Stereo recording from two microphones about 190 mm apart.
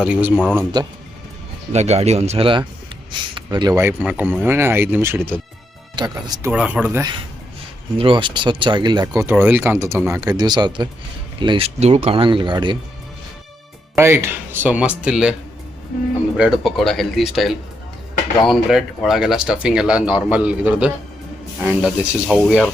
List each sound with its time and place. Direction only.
0.0 s speech: 10° right (ahead or behind)
1.7 s speech: 35° right (ahead or behind); by 5.4 s 10° right (ahead or behind)
6.0 s speech: 20° right (ahead or behind)
6.5 s speech: 5° right (ahead or behind)
7.9 s speech: 25° right (ahead or behind)
9.2 s speech: 10° right (ahead or behind)
13.9 s speech: 15° right (ahead or behind)
16.4 s speech: centre (ahead or behind)